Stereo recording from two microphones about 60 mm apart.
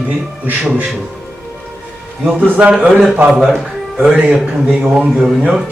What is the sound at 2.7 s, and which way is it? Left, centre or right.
Speech, centre.